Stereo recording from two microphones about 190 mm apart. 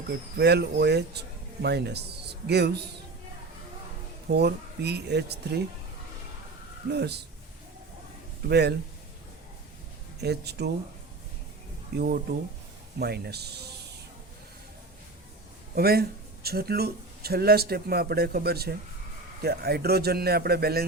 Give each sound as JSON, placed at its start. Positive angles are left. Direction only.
{"t": 0.3, "sound": "speech", "side_deg": -60}
{"t": 4.3, "sound": "speech", "side_deg": -60}
{"t": 6.9, "sound": "speech", "side_deg": -60}
{"t": 8.4, "sound": "speech", "side_deg": -60}
{"t": 10.2, "sound": "speech", "side_deg": -60}
{"t": 11.9, "sound": "speech", "side_deg": -55}
{"t": 15.7, "sound": "speech", "side_deg": -55}